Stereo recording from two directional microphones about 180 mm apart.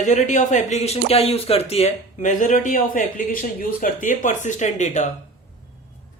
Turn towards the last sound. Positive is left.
turn(degrees=40)  # may be behind; listen again after turning